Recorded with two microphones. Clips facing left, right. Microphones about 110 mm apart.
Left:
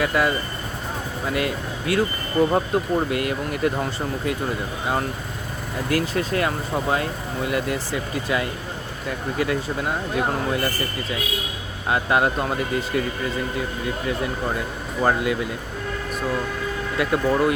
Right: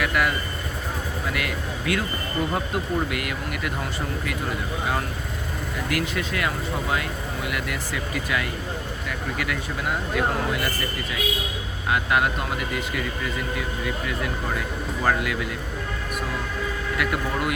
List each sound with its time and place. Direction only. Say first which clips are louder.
0.0 s speech: left 3 dB; 25° left (ahead or behind)
5.9 s speech: left 5 dB; 35° left (ahead or behind)
11.9 s speech: left 2 dB; 30° left (ahead or behind)
17.0 s speech: left 7 dB; 30° left (ahead or behind)